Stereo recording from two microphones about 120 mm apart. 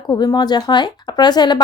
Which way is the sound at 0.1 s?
35° left (ahead or behind).